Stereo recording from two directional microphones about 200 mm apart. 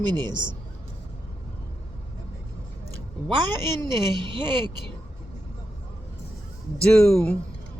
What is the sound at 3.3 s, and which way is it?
Speech, 25° right (ahead or behind).